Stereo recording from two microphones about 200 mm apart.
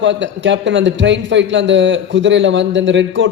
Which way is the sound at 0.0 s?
65° right (ahead or behind).